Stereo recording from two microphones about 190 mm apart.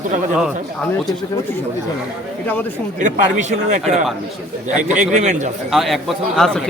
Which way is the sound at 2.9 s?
40° right (ahead or behind).